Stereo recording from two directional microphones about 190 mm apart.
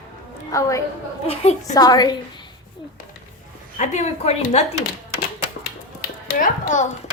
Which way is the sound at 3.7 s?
40° left (ahead or behind).